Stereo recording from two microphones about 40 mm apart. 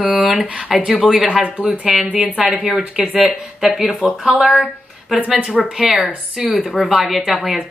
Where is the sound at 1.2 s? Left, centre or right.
Right.